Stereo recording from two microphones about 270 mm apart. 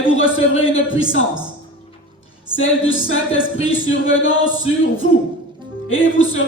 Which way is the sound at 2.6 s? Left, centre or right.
Left.